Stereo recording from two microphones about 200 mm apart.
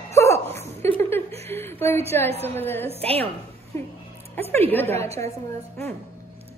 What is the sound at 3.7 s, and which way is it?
A woman's voice, 15° left (ahead or behind).